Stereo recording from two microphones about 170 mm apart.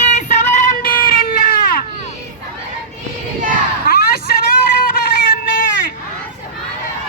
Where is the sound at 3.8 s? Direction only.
65° left (ahead or behind).